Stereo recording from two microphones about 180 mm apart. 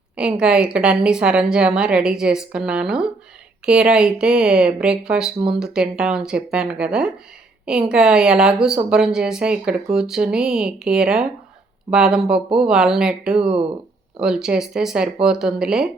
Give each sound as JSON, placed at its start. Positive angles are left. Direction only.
{"t": 0.2, "sound": "a woman's voice", "side_deg": -5}